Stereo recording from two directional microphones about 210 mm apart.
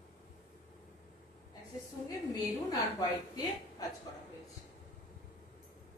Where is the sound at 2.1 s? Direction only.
20° left (ahead or behind).